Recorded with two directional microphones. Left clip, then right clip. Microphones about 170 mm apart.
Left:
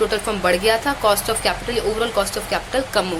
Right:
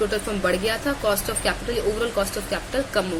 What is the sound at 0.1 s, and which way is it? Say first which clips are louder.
A woman's voice: left 4 dB; 15° left (ahead or behind).